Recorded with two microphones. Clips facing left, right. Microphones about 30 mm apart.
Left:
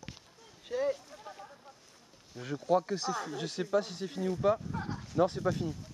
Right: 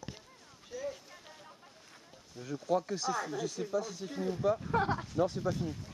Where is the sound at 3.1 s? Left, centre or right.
Centre.